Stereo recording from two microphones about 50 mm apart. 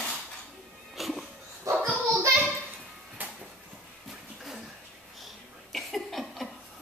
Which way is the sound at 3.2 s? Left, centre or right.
Right.